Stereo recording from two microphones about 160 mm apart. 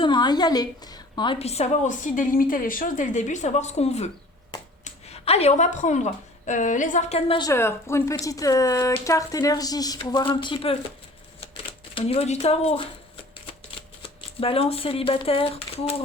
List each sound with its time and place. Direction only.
0.0 s a woman's voice: 25° left (ahead or behind)
4.8 s a sound: 40° left (ahead or behind)
6.4 s a woman's voice: 50° left (ahead or behind)
7.3 s a woman's voice: 30° left (ahead or behind)
7.5 s a woman's voice: 15° left (ahead or behind); by 12.9 s 35° left (ahead or behind)
14.4 s speech: 35° left (ahead or behind)